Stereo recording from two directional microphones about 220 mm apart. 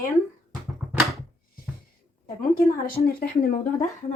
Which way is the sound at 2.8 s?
40° left (ahead or behind).